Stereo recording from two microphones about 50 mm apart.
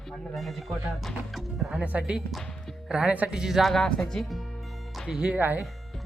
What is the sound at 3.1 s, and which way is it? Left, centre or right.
Speech, right.